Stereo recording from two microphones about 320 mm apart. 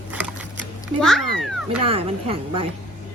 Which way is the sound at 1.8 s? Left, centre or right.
Centre.